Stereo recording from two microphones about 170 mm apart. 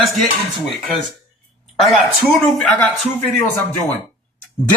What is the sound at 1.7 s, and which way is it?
Speech, centre (ahead or behind).